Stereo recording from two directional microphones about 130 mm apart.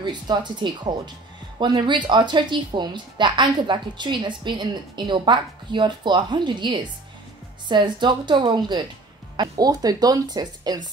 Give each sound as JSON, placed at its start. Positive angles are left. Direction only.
{"t": 0.0, "sound": "a woman's voice", "side_deg": -35}